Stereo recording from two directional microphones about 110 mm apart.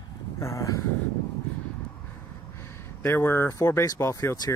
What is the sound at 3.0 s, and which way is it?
Speech, 20° left (ahead or behind).